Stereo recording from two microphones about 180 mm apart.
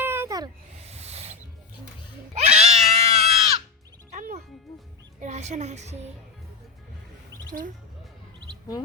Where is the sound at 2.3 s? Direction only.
35° right (ahead or behind).